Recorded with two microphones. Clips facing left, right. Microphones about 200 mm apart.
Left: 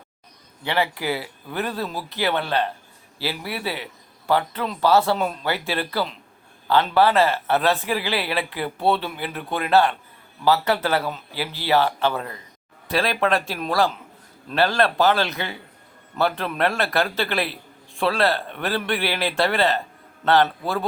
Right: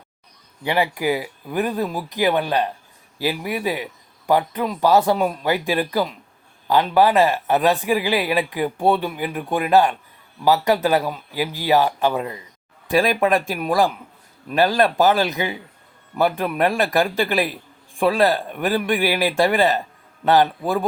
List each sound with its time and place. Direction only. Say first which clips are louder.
0.6 s a man's voice: right 3 dB; 15° right (ahead or behind)